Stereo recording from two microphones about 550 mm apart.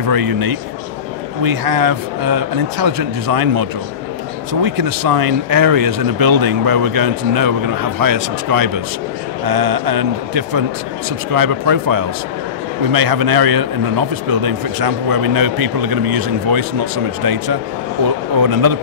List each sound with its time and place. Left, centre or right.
0.1 s speech: right
4.6 s speech: right